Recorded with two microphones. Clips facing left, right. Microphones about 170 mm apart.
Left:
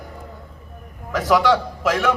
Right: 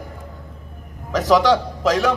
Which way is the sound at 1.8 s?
35° right (ahead or behind).